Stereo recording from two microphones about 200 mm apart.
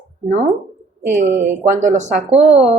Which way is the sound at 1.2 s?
40° right (ahead or behind).